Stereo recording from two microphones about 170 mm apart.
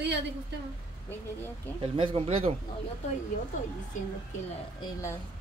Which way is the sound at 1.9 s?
30° right (ahead or behind).